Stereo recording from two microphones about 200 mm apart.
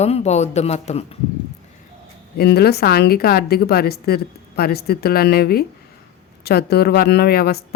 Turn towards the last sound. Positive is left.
turn(degrees=50)  # may be behind; listen again after turning